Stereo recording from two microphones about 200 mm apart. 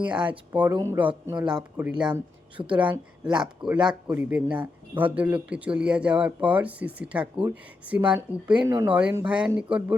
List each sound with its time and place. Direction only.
0.0 s speech: 5° right (ahead or behind)
2.6 s a woman's voice: 20° right (ahead or behind)
3.4 s speech: 5° right (ahead or behind)